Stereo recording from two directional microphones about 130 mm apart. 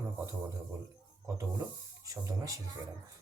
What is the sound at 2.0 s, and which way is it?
Speech, 25° right (ahead or behind).